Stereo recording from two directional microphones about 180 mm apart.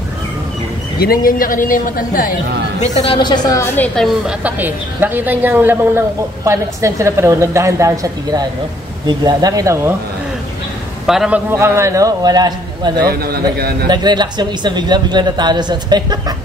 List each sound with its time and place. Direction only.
0.9 s a woman's voice: 55° left (ahead or behind); by 3.2 s 40° left (ahead or behind)
3.2 s a woman's voice: 25° left (ahead or behind); by 9.9 s 20° right (ahead or behind)
11.1 s a woman's voice: 5° right (ahead or behind); by 12.9 s 25° right (ahead or behind)
13.0 s a man's voice: 60° right (ahead or behind)
13.8 s speech: 25° right (ahead or behind)